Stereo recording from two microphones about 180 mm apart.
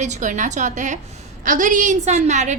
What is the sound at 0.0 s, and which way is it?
A woman's voice, 40° right (ahead or behind).